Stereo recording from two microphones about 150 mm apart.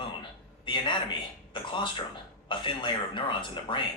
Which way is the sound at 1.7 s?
30° left (ahead or behind).